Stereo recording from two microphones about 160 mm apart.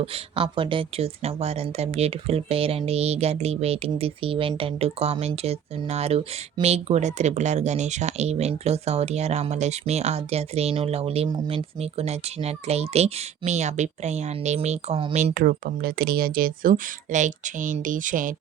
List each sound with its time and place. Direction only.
0.0 s speech: 35° right (ahead or behind)
15.2 s speech: 65° right (ahead or behind)